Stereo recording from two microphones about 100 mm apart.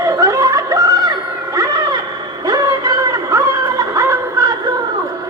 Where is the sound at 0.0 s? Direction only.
35° right (ahead or behind).